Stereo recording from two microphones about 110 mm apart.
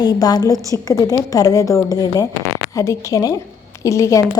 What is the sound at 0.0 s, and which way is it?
A woman's voice, 35° left (ahead or behind).